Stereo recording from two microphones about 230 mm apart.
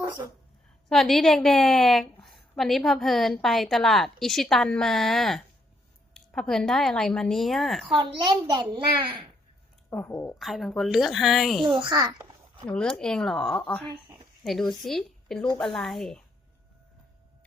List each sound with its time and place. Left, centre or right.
0.9 s a woman's voice: centre
7.9 s a child's voice: centre
9.9 s a woman's voice: centre
11.6 s a child's voice: centre
12.6 s a woman's voice: centre